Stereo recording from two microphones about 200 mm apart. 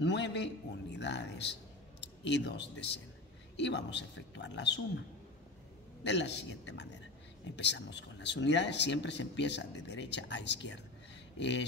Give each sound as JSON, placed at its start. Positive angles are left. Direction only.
{"t": 0.0, "sound": "speech", "side_deg": 60}
{"t": 6.0, "sound": "speech", "side_deg": 60}